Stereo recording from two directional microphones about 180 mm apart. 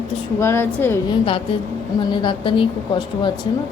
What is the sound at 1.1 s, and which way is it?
A woman's voice, 30° left (ahead or behind).